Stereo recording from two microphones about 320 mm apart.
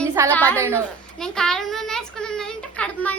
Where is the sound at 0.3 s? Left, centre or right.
Centre.